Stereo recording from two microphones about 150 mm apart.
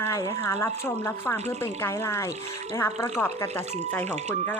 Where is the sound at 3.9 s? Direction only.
10° left (ahead or behind).